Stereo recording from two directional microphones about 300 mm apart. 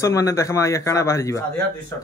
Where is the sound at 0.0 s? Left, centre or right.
Centre.